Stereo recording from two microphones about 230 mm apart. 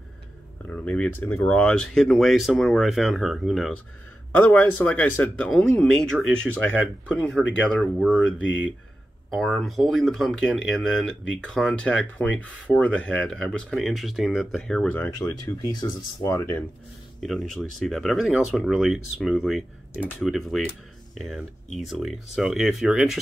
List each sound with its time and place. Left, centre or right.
0.7 s speech: centre
17.2 s speech: centre